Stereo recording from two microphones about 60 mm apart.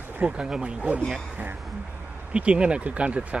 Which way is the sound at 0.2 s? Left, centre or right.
Centre.